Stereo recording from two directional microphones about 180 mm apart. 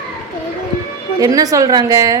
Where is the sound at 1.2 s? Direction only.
20° right (ahead or behind).